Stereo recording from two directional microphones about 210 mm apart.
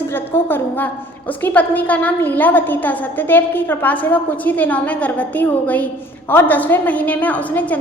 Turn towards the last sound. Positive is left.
turn(degrees=5)  # may be behind; listen again after turning